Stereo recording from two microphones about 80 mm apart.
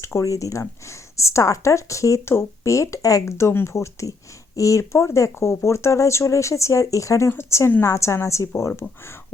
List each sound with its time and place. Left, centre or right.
0.0 s speech: left